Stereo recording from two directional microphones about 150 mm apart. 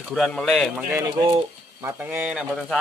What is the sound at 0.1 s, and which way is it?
Speech, 5° left (ahead or behind).